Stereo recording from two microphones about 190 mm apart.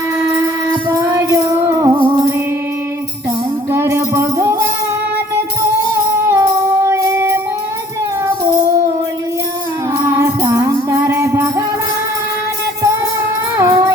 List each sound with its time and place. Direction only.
0.9 s music: 15° right (ahead or behind)
3.7 s music: 15° right (ahead or behind)
5.9 s music: 15° right (ahead or behind)
10.1 s music: 15° right (ahead or behind)
13.6 s a sound: 15° right (ahead or behind)